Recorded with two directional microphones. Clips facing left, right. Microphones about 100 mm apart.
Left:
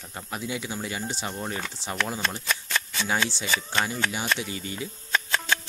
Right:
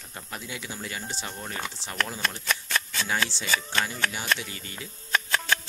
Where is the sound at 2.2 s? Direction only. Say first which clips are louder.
Even; centre (ahead or behind).